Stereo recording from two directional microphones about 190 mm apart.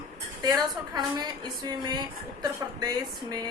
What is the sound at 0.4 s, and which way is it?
A woman's voice, 20° right (ahead or behind).